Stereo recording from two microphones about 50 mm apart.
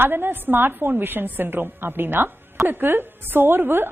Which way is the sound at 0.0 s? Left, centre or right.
Right.